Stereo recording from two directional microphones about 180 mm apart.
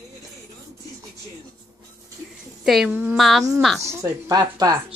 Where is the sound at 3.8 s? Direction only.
15° right (ahead or behind).